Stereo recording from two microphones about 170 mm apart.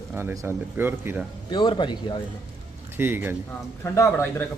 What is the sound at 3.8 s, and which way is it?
Speech, 15° left (ahead or behind).